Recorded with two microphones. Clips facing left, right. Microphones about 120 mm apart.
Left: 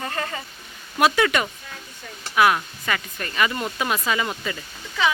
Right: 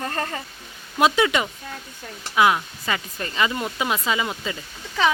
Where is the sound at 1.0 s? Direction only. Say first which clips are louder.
Even; 20° right (ahead or behind).